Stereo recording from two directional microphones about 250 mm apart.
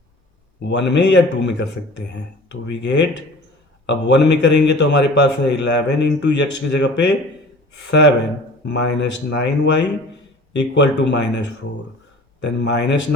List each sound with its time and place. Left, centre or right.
0.6 s speech: left
12.4 s speech: left